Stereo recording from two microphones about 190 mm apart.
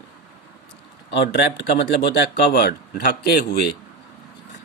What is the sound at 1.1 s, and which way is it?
Speech, 70° left (ahead or behind).